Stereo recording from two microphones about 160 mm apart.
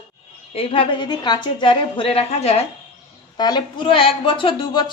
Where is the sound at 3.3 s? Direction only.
25° left (ahead or behind).